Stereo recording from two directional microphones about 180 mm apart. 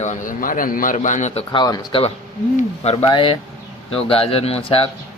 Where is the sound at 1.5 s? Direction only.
20° left (ahead or behind).